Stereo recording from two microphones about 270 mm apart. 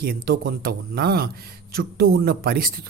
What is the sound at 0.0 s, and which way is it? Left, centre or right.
A man's voice, right.